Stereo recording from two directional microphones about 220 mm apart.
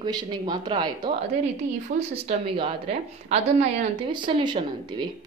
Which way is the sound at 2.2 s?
25° right (ahead or behind).